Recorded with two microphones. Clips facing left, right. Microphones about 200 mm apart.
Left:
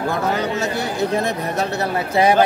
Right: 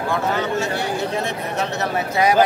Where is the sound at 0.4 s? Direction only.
40° left (ahead or behind).